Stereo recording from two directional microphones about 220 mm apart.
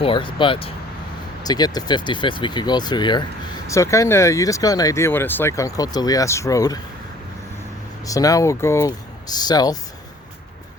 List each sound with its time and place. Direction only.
0.0 s speech: 20° left (ahead or behind)
8.0 s speech: 15° left (ahead or behind)